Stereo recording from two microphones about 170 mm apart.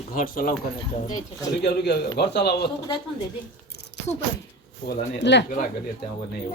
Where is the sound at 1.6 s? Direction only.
75° left (ahead or behind).